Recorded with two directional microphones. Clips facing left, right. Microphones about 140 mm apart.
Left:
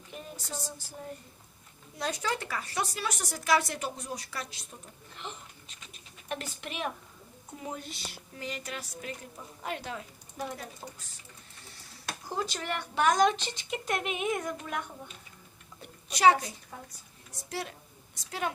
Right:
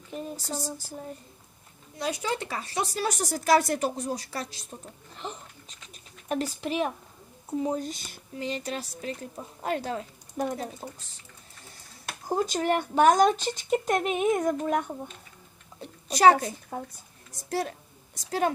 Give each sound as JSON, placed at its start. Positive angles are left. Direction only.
{"t": 0.1, "sound": "a woman's voice", "side_deg": -35}
{"t": 2.2, "sound": "speech", "side_deg": -20}
{"t": 2.9, "sound": "a woman's voice", "side_deg": -35}
{"t": 8.4, "sound": "a woman's voice", "side_deg": -25}
{"t": 10.8, "sound": "speech", "side_deg": -20}
{"t": 12.3, "sound": "a woman's voice", "side_deg": -45}